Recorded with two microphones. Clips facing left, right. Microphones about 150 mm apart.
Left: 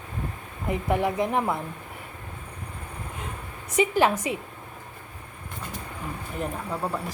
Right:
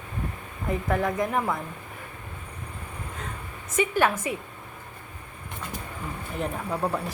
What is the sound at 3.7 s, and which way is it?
Speech, 15° left (ahead or behind).